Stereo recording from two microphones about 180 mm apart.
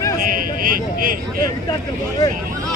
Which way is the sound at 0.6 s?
50° right (ahead or behind).